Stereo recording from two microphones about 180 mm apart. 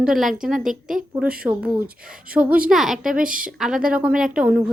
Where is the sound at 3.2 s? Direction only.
50° right (ahead or behind).